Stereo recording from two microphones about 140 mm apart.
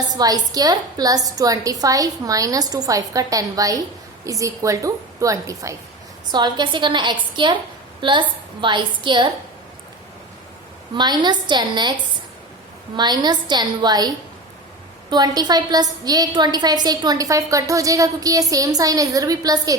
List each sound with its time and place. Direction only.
0.1 s a woman's voice: 25° right (ahead or behind)
10.9 s a woman's voice: 30° right (ahead or behind)
13.0 s a woman's voice: 30° right (ahead or behind)
15.1 s a woman's voice: 30° right (ahead or behind)